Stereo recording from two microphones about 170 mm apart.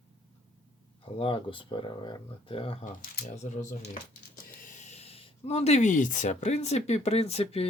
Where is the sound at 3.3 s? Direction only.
45° left (ahead or behind).